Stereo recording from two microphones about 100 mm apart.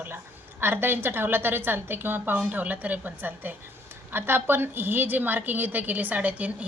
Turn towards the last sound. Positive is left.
turn(degrees=-15)  # may be behind; listen again after turning